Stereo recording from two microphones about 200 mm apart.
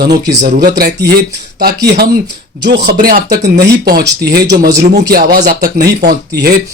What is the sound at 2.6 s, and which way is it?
Speech, 50° right (ahead or behind).